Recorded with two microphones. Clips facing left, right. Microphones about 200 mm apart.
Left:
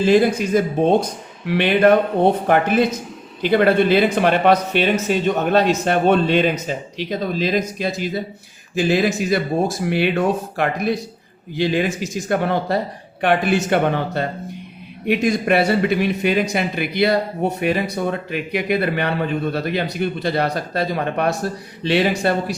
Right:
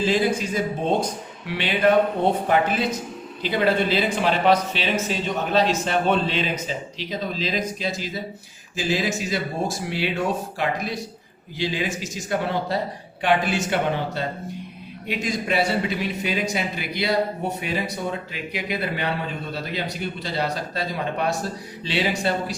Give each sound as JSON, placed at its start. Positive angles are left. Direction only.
{"t": 0.1, "sound": "speech", "side_deg": 55}